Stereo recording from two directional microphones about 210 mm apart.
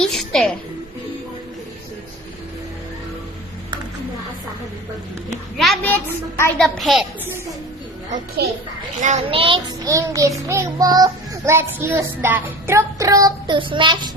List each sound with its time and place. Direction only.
0.0 s a woman's voice: centre (ahead or behind)
5.5 s a woman's voice: centre (ahead or behind)
9.0 s child singing: 35° right (ahead or behind)